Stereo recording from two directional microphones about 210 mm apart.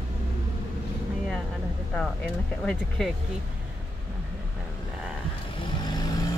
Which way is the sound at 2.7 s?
Centre (ahead or behind).